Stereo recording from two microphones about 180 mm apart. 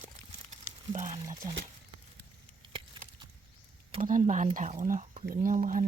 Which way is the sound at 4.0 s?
45° right (ahead or behind).